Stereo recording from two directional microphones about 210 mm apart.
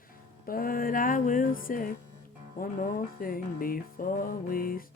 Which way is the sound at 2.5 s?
40° left (ahead or behind).